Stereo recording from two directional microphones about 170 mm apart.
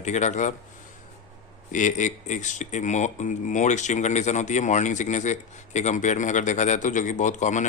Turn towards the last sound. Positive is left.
turn(degrees=45)  # may be behind; listen again after turning